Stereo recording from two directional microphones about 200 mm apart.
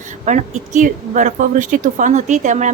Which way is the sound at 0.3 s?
35° right (ahead or behind).